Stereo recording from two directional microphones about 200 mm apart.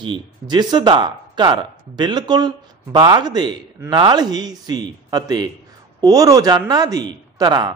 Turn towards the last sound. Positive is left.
turn(degrees=-20)  # may be behind; listen again after turning